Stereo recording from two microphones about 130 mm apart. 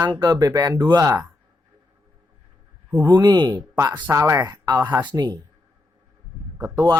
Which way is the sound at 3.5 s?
20° right (ahead or behind).